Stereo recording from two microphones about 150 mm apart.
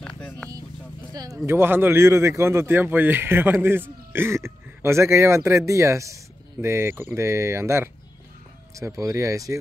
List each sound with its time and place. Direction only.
0.0 s vehicle: 5° left (ahead or behind)
1.1 s speech: 25° right (ahead or behind)